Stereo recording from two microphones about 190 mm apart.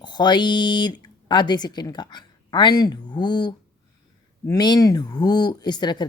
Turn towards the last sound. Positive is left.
turn(degrees=20)  # may be behind; listen again after turning